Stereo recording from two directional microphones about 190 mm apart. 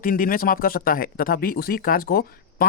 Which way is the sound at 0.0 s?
45° left (ahead or behind).